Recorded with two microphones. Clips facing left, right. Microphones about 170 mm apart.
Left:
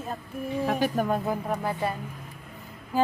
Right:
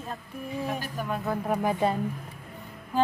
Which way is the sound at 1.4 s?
5° right (ahead or behind).